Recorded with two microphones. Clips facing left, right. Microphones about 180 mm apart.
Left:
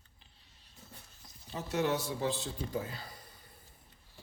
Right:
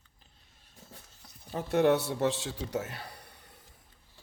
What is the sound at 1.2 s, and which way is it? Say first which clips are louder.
Speech: right 5 dB; 55° right (ahead or behind).